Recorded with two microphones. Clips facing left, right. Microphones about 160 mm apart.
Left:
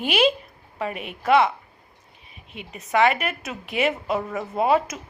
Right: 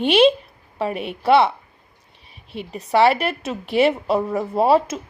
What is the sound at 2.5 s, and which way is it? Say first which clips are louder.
A woman's voice: right 4 dB; 35° right (ahead or behind).